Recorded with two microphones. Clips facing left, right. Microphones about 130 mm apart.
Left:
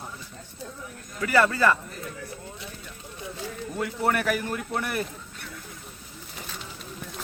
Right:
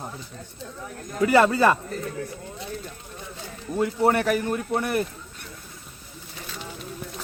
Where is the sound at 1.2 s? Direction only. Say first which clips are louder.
Right 4 dB; 25° right (ahead or behind).